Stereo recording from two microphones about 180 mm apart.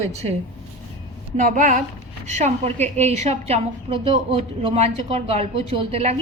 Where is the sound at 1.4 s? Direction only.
45° right (ahead or behind).